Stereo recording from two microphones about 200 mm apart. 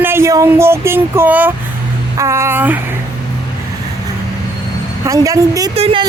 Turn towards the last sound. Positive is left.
turn(degrees=-30)  # may be behind; listen again after turning